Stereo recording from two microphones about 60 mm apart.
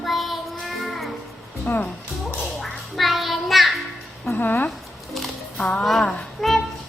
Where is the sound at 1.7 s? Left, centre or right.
Left.